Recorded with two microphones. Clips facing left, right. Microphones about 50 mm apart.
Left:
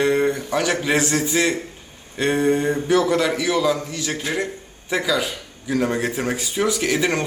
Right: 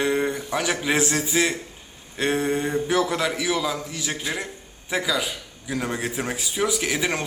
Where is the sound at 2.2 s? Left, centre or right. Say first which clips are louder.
Left 4 dB; centre.